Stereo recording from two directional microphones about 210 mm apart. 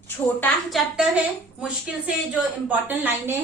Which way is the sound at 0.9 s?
5° right (ahead or behind).